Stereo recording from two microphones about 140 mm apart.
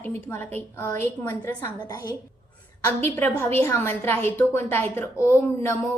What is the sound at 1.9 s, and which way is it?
Speech, 30° left (ahead or behind).